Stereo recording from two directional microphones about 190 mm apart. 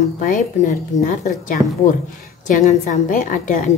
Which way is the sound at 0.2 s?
45° left (ahead or behind).